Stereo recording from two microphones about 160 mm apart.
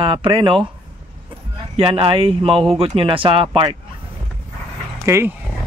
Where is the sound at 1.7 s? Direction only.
35° right (ahead or behind).